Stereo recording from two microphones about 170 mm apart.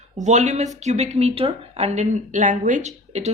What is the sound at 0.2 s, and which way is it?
A woman's voice, 45° right (ahead or behind).